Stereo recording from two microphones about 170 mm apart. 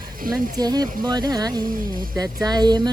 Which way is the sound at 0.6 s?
25° right (ahead or behind).